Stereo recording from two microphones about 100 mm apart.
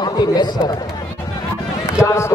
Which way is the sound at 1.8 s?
30° left (ahead or behind).